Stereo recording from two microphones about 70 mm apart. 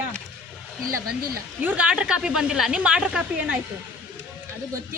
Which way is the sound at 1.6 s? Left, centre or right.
Right.